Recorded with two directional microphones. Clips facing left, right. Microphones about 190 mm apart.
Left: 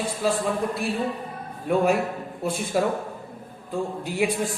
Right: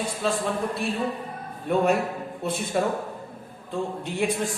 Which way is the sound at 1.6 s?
Centre (ahead or behind).